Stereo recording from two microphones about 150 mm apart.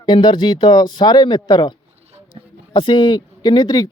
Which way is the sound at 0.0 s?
30° left (ahead or behind).